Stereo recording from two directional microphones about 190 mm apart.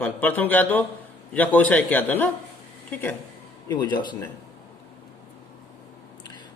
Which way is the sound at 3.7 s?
20° left (ahead or behind).